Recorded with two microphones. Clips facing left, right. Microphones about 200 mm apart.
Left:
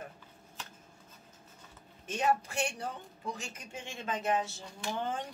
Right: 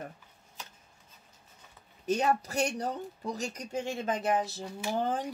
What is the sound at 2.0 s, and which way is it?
Speech, 40° right (ahead or behind).